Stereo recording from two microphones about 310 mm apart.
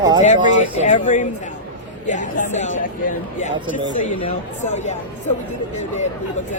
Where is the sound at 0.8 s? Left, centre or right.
Left.